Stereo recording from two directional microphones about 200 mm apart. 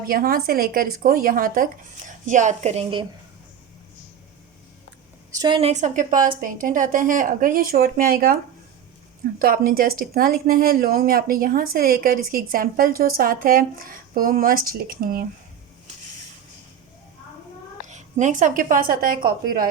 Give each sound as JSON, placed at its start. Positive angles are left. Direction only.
{"t": 0.1, "sound": "speech", "side_deg": -45}
{"t": 5.3, "sound": "a woman's voice", "side_deg": -20}
{"t": 9.4, "sound": "speech", "side_deg": -45}
{"t": 17.8, "sound": "speech", "side_deg": -35}